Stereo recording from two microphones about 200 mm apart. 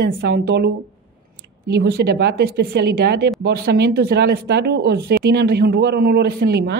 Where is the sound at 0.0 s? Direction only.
55° right (ahead or behind).